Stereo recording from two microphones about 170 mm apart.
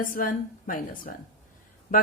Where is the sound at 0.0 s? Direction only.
55° left (ahead or behind).